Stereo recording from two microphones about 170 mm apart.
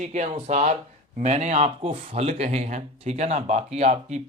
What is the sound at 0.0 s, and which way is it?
Speech, 45° right (ahead or behind).